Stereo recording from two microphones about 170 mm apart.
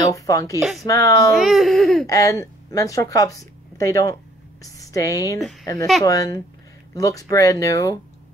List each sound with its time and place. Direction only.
0.0 s speech: 20° left (ahead or behind)
0.6 s speech: centre (ahead or behind)
0.8 s speech: 20° left (ahead or behind)
1.3 s speech: centre (ahead or behind)
2.0 s speech: 20° left (ahead or behind)
5.4 s speech: centre (ahead or behind)
6.0 s speech: 20° left (ahead or behind)